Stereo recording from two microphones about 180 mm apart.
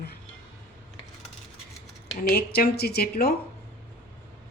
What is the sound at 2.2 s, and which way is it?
Speech, 55° left (ahead or behind).